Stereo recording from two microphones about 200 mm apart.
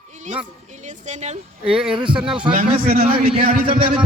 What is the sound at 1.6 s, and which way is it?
Speech, 5° right (ahead or behind).